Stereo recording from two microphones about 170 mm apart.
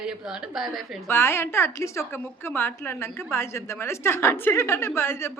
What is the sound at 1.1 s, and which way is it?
A woman's voice, 15° left (ahead or behind).